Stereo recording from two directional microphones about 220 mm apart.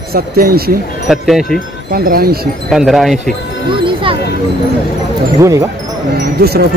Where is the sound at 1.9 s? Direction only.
40° right (ahead or behind).